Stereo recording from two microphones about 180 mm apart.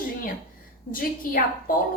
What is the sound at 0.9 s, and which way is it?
Speech, 50° left (ahead or behind).